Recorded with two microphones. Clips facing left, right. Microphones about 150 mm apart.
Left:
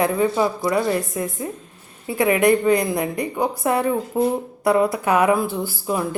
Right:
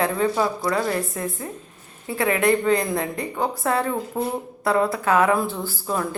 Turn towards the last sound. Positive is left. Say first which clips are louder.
# left 2 dB
turn(degrees=10)  # may be behind; listen again after turning